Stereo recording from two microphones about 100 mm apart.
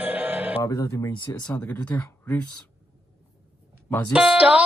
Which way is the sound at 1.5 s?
15° left (ahead or behind).